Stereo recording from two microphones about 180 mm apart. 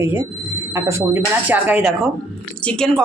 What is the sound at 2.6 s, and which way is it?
Speech, 5° left (ahead or behind).